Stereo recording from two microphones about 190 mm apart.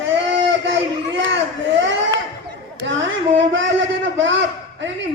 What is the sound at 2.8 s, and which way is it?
A man's voice, 75° right (ahead or behind).